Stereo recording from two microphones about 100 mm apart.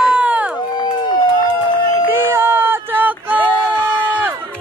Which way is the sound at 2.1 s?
25° right (ahead or behind).